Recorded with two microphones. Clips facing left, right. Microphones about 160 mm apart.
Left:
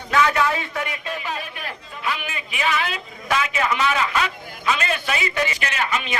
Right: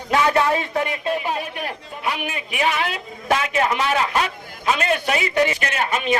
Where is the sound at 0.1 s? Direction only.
30° right (ahead or behind).